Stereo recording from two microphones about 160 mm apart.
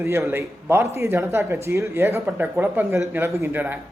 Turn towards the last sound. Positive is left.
turn(degrees=-10)  # may be behind; listen again after turning